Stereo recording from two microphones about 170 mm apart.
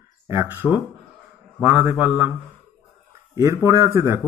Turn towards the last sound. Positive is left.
turn(degrees=-15)  # may be behind; listen again after turning